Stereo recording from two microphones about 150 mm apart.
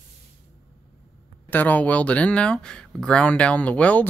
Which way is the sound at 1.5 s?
10° left (ahead or behind).